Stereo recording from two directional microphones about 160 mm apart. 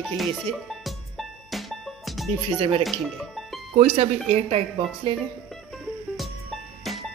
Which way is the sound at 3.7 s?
40° right (ahead or behind).